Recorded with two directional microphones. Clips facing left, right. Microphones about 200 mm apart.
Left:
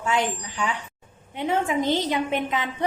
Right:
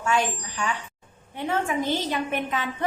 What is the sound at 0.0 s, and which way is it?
A woman's voice, 20° left (ahead or behind).